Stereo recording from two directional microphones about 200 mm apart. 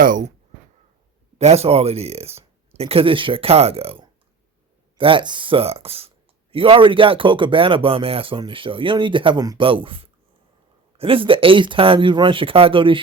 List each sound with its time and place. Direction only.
0.0 s speech: 40° right (ahead or behind)
1.4 s speech: 30° right (ahead or behind)